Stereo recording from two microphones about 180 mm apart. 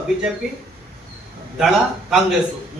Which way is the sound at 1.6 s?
Centre (ahead or behind).